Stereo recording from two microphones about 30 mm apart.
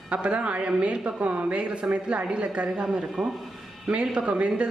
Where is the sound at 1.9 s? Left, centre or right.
Right.